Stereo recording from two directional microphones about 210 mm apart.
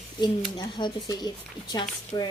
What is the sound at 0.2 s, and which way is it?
A child's voice, 20° left (ahead or behind).